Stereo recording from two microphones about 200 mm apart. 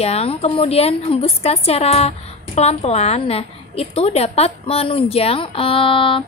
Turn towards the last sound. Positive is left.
turn(degrees=25)  # may be behind; listen again after turning